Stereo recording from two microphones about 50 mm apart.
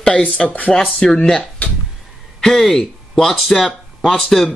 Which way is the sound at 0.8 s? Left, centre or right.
Centre.